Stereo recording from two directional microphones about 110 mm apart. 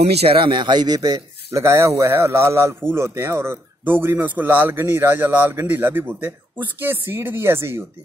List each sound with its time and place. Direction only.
0.0 s speech: 70° right (ahead or behind); by 7.8 s 20° right (ahead or behind)